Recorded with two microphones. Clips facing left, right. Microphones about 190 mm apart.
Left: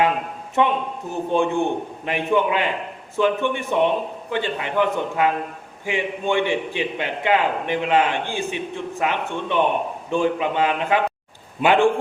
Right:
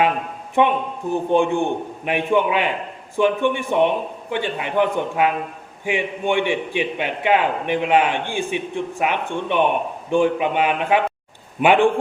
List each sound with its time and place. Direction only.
0.6 s a man's voice: 15° right (ahead or behind)